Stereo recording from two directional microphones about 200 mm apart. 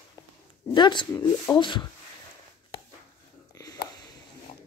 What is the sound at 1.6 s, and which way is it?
Speech, 25° left (ahead or behind).